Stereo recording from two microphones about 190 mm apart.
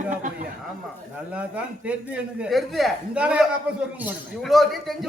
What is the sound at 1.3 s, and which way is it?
A man's voice, 5° right (ahead or behind).